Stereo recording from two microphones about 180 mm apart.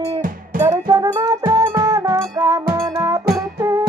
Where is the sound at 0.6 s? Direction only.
20° right (ahead or behind).